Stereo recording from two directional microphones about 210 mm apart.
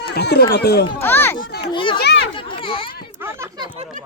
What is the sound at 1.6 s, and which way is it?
Children playing, 25° left (ahead or behind).